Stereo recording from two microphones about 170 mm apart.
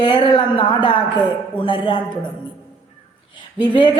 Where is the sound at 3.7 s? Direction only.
30° left (ahead or behind).